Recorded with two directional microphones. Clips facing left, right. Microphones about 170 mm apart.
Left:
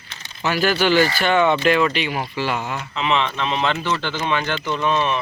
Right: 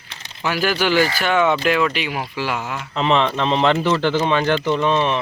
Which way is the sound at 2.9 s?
40° right (ahead or behind).